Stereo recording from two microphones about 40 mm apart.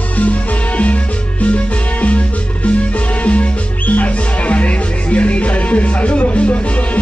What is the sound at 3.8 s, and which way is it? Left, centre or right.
Music, left.